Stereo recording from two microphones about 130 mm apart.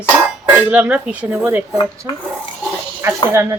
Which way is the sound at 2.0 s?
20° right (ahead or behind).